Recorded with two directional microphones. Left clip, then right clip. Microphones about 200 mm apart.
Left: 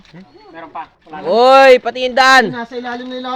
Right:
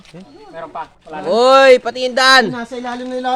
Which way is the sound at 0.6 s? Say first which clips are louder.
Right 1 dB; 15° right (ahead or behind).